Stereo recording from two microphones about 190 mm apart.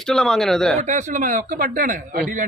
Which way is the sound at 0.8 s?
40° right (ahead or behind).